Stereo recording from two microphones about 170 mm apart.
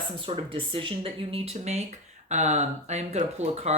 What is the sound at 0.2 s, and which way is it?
Speech, 30° right (ahead or behind).